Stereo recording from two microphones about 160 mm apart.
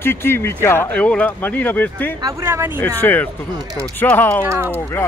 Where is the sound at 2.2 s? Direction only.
20° right (ahead or behind).